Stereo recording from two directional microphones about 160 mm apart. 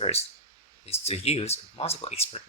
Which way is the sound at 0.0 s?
40° left (ahead or behind).